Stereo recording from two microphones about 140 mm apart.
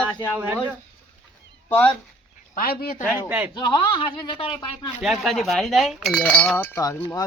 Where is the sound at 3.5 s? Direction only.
30° left (ahead or behind).